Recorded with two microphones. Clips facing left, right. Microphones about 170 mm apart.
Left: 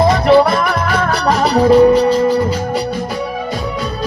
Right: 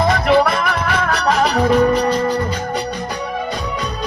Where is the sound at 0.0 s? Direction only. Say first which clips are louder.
Left 4 dB; 30° left (ahead or behind).